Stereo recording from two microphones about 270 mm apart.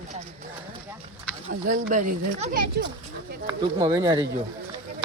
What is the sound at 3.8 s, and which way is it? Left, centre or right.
Speech, centre.